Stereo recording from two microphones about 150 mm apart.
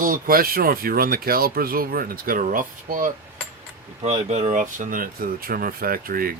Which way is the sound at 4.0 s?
50° right (ahead or behind).